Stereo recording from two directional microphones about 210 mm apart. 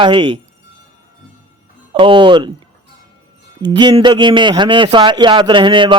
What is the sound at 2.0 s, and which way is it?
Speech, 25° right (ahead or behind).